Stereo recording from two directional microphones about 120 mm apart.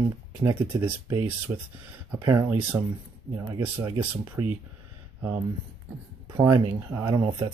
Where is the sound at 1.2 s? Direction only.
15° right (ahead or behind).